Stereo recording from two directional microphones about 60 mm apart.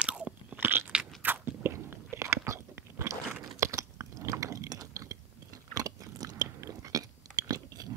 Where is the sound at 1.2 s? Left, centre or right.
Right.